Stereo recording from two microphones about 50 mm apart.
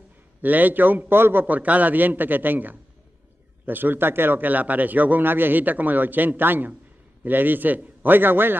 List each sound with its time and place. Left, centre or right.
0.4 s a man's voice: right